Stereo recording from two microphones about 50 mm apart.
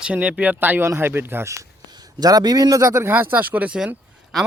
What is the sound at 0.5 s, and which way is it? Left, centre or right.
Speech, right.